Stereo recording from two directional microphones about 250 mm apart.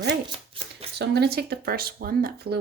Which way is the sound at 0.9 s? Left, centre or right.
Right.